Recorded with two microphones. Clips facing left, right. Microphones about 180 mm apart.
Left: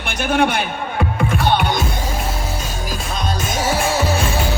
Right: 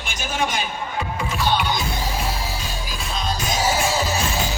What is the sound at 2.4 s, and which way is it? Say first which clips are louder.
Music: left 4 dB; 45° left (ahead or behind).